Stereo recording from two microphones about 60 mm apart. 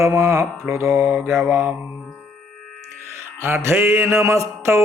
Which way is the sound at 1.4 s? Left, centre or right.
Right.